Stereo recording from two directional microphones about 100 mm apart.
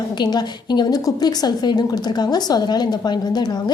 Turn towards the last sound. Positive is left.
turn(degrees=45)  # may be behind; listen again after turning